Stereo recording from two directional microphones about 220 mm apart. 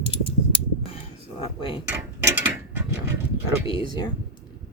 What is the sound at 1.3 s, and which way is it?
Speech, 25° left (ahead or behind).